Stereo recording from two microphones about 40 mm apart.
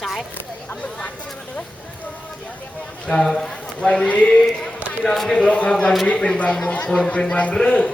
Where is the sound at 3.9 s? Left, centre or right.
Left.